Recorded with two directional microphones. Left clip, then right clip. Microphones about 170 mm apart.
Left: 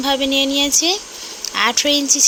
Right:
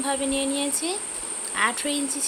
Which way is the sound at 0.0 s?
40° left (ahead or behind).